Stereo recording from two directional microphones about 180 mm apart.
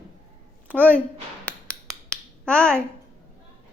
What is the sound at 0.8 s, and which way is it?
Speech, 10° left (ahead or behind).